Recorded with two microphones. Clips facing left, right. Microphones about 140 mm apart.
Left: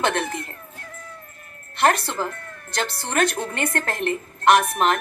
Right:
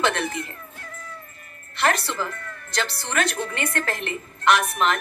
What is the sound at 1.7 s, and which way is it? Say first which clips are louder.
A woman's voice: left 3 dB; 50° left (ahead or behind).